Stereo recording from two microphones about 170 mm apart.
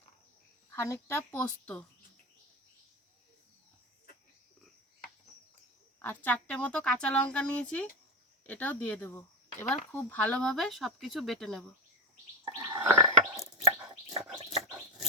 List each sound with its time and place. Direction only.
0.8 s speech: 15° left (ahead or behind)
6.0 s speech: 10° left (ahead or behind)
12.5 s gargling: 20° right (ahead or behind)
13.7 s whispering: 15° right (ahead or behind)